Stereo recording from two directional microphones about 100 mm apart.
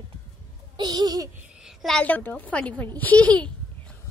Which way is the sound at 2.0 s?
15° left (ahead or behind).